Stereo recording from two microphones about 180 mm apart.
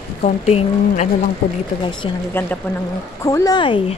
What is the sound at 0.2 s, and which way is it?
Speech, 40° left (ahead or behind).